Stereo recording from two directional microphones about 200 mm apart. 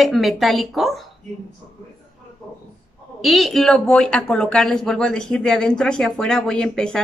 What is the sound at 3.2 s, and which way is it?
Speech, centre (ahead or behind).